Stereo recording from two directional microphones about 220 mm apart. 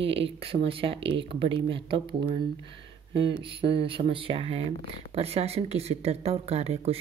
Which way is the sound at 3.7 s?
25° right (ahead or behind).